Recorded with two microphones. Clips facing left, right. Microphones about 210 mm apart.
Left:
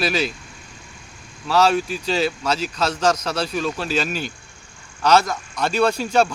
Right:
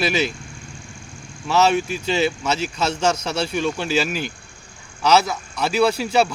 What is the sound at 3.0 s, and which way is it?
Speech, 10° right (ahead or behind).